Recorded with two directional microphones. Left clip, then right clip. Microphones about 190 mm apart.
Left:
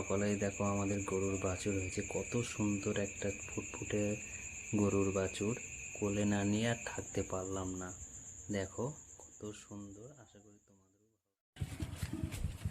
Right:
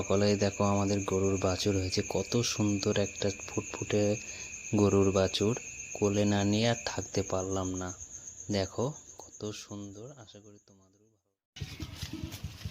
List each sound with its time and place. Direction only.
0.1 s speech: 40° right (ahead or behind)